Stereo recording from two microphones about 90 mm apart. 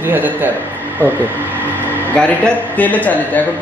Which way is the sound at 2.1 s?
15° left (ahead or behind).